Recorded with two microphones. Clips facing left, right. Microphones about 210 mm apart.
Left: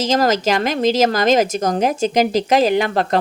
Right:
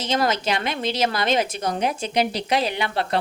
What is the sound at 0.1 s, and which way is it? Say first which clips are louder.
A woman's voice: left 4 dB; 40° left (ahead or behind).